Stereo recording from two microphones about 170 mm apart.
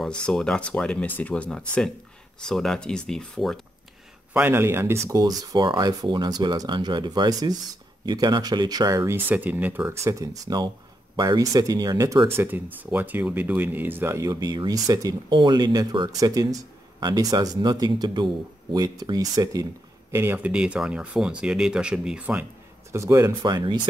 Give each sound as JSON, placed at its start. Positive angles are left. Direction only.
{"t": 0.3, "sound": "speech", "side_deg": 5}
{"t": 4.3, "sound": "speech", "side_deg": -10}
{"t": 12.4, "sound": "speech", "side_deg": -10}
{"t": 22.9, "sound": "speech", "side_deg": -20}